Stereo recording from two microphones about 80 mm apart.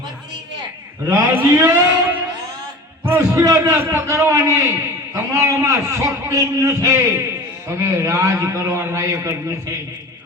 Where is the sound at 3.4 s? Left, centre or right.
Right.